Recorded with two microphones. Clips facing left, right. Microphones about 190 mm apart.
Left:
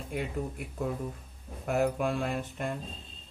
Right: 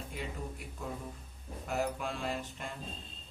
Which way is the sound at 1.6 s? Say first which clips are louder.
Left 7 dB; 55° left (ahead or behind).